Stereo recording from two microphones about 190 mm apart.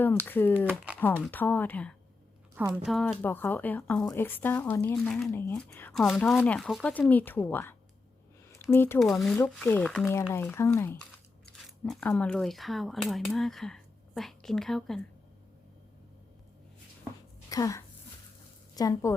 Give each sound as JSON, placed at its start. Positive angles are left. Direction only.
{"t": 0.0, "sound": "speech", "side_deg": 10}
{"t": 2.6, "sound": "speech", "side_deg": -10}
{"t": 9.0, "sound": "speech", "side_deg": 0}
{"t": 17.5, "sound": "a woman's voice", "side_deg": 15}